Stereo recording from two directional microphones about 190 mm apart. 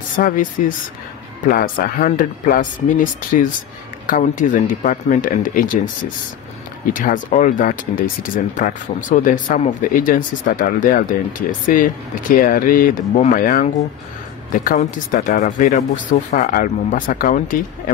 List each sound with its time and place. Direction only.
0.1 s speech: 45° left (ahead or behind)
6.9 s speech: 45° left (ahead or behind)